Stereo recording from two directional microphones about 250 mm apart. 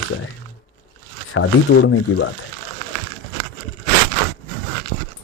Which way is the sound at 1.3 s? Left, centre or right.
Left.